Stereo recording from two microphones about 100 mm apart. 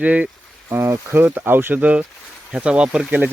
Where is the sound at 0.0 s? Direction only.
15° right (ahead or behind).